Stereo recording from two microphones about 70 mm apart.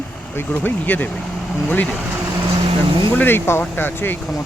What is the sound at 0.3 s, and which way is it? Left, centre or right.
Speech, left.